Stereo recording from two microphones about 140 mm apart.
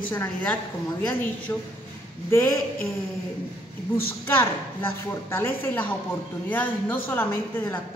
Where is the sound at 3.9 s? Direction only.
15° left (ahead or behind).